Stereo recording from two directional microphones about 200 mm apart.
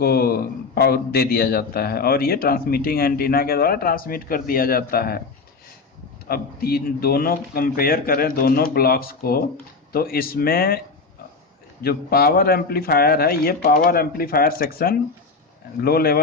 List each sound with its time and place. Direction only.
0.0 s a man's voice: 50° left (ahead or behind)
6.2 s a man's voice: 50° left (ahead or behind)
11.8 s a man's voice: 50° left (ahead or behind)